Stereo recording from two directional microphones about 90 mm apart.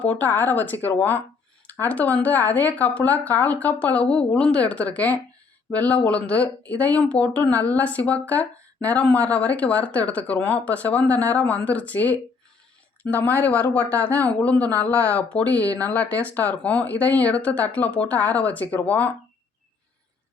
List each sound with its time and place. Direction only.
0.0 s speech: 20° left (ahead or behind)